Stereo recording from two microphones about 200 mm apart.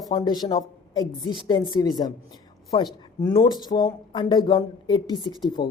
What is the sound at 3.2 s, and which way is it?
Speech, 20° left (ahead or behind).